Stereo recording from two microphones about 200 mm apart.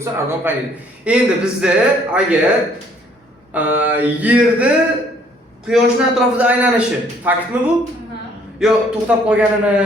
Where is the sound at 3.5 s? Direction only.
10° right (ahead or behind).